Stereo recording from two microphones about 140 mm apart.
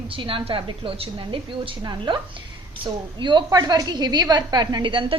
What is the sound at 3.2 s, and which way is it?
A woman's voice, 35° right (ahead or behind).